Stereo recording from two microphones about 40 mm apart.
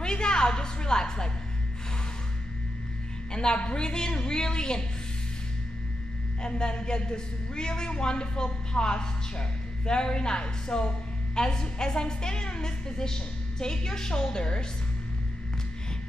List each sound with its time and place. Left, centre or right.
0.0 s a sound: left
3.3 s speech: left
6.4 s speech: left